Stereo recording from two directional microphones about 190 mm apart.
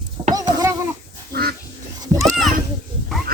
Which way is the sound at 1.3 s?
55° right (ahead or behind).